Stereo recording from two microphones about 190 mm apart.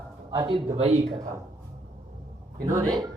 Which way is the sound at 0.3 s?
20° right (ahead or behind).